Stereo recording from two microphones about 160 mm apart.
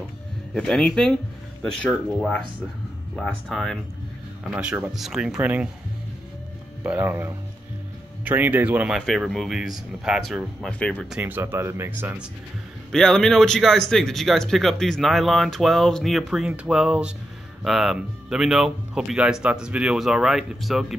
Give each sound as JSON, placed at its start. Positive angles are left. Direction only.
{"t": 0.6, "sound": "speech", "side_deg": 5}
{"t": 6.8, "sound": "speech", "side_deg": -10}
{"t": 11.1, "sound": "speech", "side_deg": -10}
{"t": 12.9, "sound": "speech", "side_deg": 5}